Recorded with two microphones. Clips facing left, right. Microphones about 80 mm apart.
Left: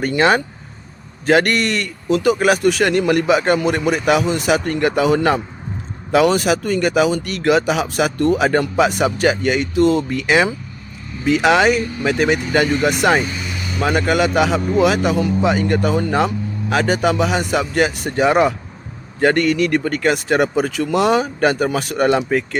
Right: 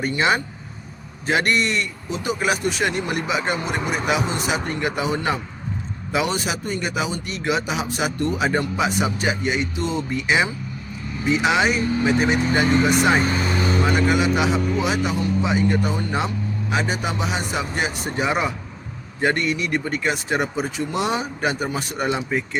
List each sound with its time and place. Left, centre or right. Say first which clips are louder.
0.0 s speech: left 5 dB; left
11.8 s speech: right 2 dB; right
12.0 s speech: left 3 dB; left
13.2 s vehicle: right 5 dB; right
13.8 s speech: left 6 dB; left